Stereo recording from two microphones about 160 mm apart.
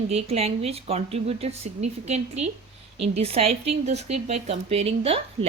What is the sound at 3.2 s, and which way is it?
A woman's voice, 40° right (ahead or behind).